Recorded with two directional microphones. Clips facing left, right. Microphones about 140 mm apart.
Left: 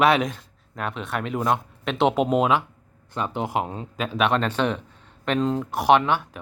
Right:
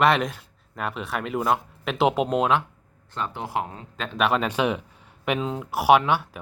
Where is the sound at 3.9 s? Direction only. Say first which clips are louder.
Left 1 dB; 5° left (ahead or behind).